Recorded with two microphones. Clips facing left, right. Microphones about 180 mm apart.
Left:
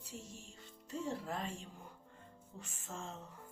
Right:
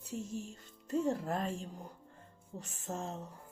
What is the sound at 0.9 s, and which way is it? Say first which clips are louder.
Speech: right 8 dB; 45° right (ahead or behind).